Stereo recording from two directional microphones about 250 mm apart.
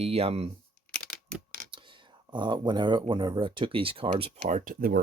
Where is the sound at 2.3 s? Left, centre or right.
Centre.